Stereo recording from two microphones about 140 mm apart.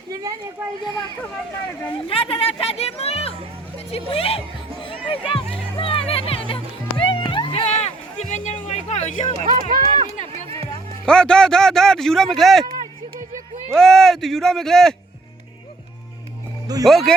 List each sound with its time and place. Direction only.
0.1 s speech: 25° right (ahead or behind)
1.9 s speech: 40° left (ahead or behind)
5.8 s music: 40° left (ahead or behind)
9.4 s run: 65° right (ahead or behind)
11.0 s speech: 5° left (ahead or behind)
13.7 s speech: 5° left (ahead or behind)
16.8 s speech: centre (ahead or behind)